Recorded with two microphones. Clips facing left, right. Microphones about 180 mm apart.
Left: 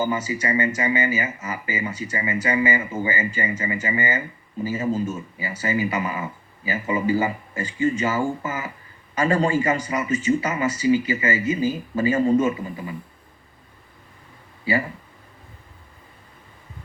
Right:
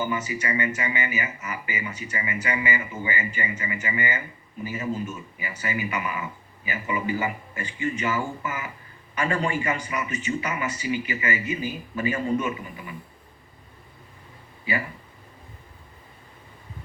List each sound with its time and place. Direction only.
0.0 s speech: 30° left (ahead or behind)